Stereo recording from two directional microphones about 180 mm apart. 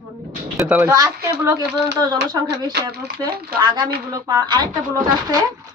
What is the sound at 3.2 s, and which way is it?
Speech, 5° left (ahead or behind).